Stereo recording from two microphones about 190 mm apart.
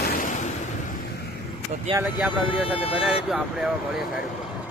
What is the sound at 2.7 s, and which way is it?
Speech, 30° left (ahead or behind).